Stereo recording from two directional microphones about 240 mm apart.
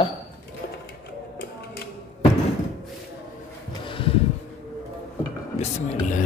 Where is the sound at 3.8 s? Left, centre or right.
Left.